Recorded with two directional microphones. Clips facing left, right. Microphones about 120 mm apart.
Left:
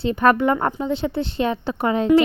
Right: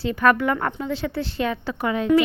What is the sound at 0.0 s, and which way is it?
A woman's voice, 25° left (ahead or behind).